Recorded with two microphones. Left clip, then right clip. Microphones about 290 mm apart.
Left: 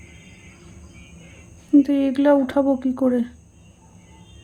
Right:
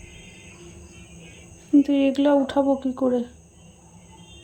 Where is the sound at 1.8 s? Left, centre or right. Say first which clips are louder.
Left 2 dB; centre.